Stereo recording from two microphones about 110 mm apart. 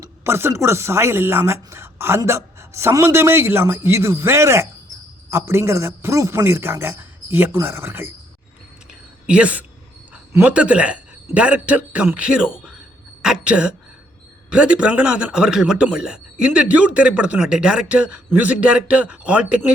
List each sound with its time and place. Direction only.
0.0 s speech: 20° right (ahead or behind)
8.9 s a sound: 10° right (ahead or behind)
10.4 s a woman's voice: 10° right (ahead or behind)